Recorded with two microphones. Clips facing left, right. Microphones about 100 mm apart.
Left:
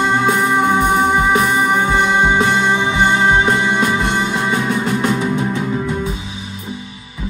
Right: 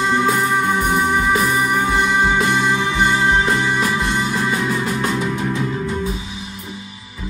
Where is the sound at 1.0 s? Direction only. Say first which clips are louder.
Left 3 dB; 55° left (ahead or behind).